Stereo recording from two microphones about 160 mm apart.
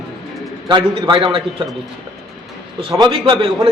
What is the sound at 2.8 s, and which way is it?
Speech, 30° right (ahead or behind).